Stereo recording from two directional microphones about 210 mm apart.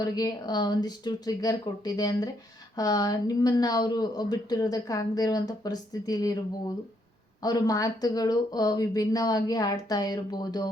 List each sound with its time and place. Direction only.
0.0 s speech: 20° left (ahead or behind)
7.4 s speech: 15° left (ahead or behind)